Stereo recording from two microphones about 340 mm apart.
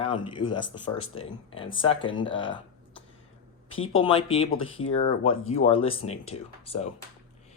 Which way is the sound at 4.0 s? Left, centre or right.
Centre.